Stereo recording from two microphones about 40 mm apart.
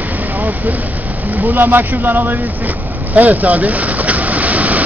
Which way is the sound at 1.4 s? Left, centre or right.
Right.